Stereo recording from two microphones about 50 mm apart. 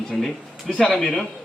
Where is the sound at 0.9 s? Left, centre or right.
Centre.